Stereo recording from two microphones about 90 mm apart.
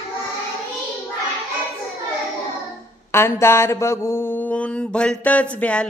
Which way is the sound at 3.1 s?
30° left (ahead or behind).